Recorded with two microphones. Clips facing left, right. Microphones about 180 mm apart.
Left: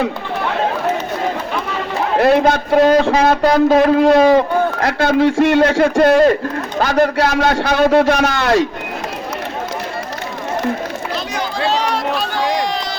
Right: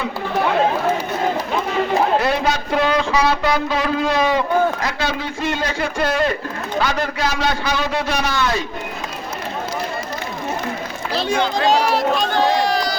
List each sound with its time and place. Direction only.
2.2 s a man's voice: 55° left (ahead or behind)
4.8 s a man's voice: 55° left (ahead or behind)
5.8 s a man's voice: 50° left (ahead or behind); by 8.6 s 65° left (ahead or behind)
11.1 s speech: 30° right (ahead or behind)
11.6 s a sound: 10° right (ahead or behind)
12.2 s run: 10° left (ahead or behind)